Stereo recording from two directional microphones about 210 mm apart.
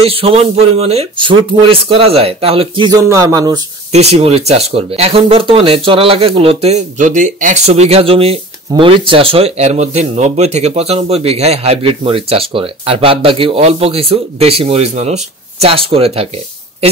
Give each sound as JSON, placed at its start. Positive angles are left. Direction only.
{"t": 0.0, "sound": "speech", "side_deg": -30}
{"t": 3.9, "sound": "speech", "side_deg": -30}